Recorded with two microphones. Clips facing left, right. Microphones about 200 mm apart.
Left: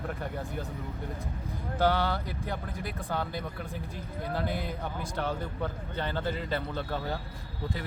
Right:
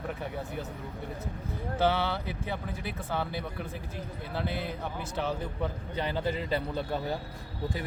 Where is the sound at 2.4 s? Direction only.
5° right (ahead or behind).